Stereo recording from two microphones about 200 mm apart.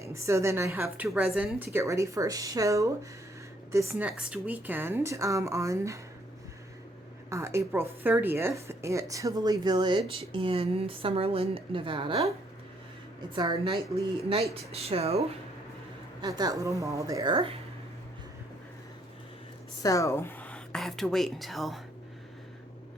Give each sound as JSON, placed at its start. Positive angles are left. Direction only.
{"t": 0.0, "sound": "a woman's voice", "side_deg": -15}
{"t": 7.3, "sound": "a woman's voice", "side_deg": -15}
{"t": 13.3, "sound": "a woman's voice", "side_deg": -25}
{"t": 16.2, "sound": "a woman's voice", "side_deg": -20}
{"t": 19.8, "sound": "speech", "side_deg": 15}